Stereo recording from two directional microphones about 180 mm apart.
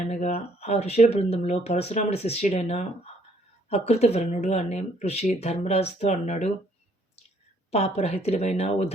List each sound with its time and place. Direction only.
0.0 s speech: 40° left (ahead or behind)
7.7 s speech: 35° left (ahead or behind)